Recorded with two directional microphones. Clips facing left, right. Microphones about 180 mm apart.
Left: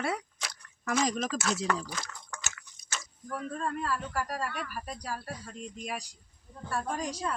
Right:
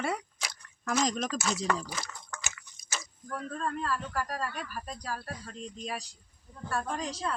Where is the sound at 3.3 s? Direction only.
10° left (ahead or behind).